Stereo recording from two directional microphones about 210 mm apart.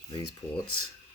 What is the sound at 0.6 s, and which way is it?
Speech, 90° left.